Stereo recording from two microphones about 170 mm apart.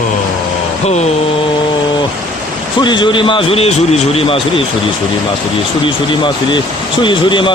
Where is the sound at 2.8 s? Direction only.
25° left (ahead or behind).